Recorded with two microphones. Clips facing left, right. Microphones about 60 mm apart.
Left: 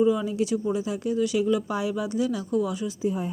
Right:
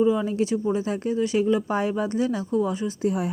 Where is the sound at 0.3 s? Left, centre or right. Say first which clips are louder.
Right 2 dB; right.